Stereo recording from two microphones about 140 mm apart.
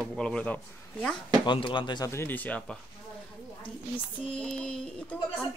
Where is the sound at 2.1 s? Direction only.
15° left (ahead or behind).